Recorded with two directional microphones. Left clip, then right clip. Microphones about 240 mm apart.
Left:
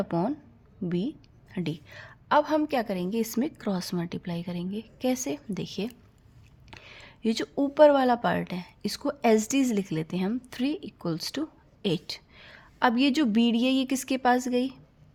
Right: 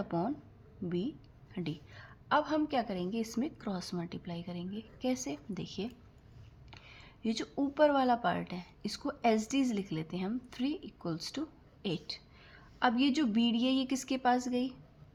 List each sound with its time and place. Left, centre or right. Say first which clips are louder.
0.0 s speech: left 6 dB; left